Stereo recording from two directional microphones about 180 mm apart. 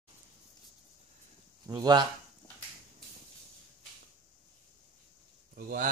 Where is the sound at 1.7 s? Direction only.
20° right (ahead or behind).